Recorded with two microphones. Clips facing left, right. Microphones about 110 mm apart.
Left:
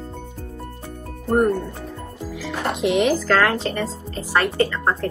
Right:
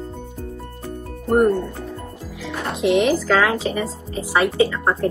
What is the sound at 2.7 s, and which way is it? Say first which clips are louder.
Speech: right 2 dB; centre (ahead or behind).